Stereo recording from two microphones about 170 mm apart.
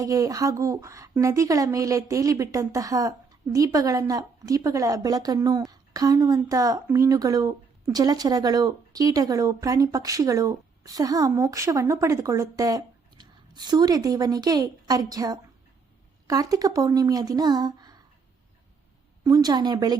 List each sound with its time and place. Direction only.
0.0 s a woman's voice: 20° right (ahead or behind)
19.2 s a woman's voice: 20° right (ahead or behind)